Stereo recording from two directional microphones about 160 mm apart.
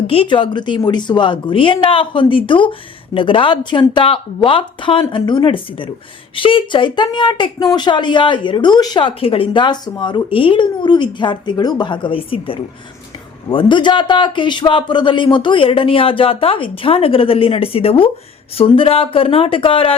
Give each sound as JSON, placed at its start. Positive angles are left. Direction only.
{"t": 0.1, "sound": "a man's voice", "side_deg": 35}